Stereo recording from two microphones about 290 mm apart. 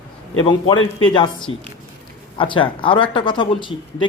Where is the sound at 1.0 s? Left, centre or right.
Centre.